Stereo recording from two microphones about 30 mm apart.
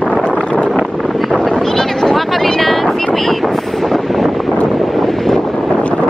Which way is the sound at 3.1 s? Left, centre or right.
Centre.